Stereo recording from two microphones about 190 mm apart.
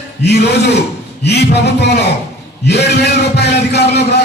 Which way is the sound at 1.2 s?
60° left (ahead or behind).